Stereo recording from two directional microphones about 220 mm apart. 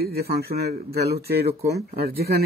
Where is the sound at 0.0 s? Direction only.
45° right (ahead or behind).